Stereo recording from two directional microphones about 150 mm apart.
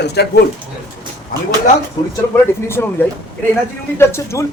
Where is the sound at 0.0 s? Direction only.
90° left.